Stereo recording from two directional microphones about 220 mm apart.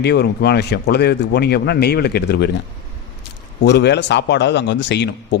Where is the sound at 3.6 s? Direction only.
50° left (ahead or behind).